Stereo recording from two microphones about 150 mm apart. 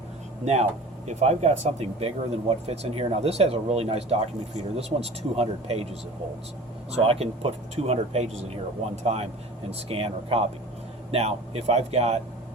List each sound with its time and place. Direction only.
0.4 s speech: 45° right (ahead or behind)
6.9 s speech: 40° right (ahead or behind)